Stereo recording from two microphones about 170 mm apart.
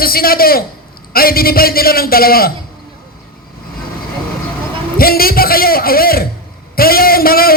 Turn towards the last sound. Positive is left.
turn(degrees=60)  # may be behind; listen again after turning